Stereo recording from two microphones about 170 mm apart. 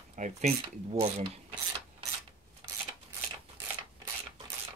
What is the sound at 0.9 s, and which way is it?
Mechanisms, 35° right (ahead or behind).